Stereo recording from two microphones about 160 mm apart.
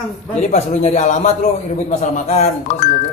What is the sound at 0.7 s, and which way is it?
Speech, 50° left (ahead or behind).